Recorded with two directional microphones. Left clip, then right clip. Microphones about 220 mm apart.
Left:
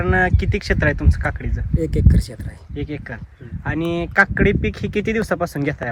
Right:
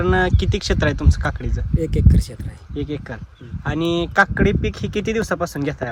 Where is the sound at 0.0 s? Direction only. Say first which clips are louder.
Even; 15° right (ahead or behind).